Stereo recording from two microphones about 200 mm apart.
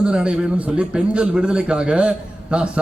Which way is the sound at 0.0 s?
5° right (ahead or behind).